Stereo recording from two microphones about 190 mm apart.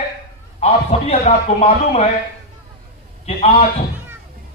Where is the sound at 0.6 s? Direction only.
35° left (ahead or behind).